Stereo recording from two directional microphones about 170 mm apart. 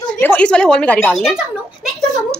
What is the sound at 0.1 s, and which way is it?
Speech, 10° left (ahead or behind).